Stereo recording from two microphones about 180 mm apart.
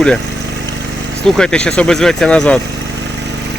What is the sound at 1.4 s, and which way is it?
Speech, 5° left (ahead or behind).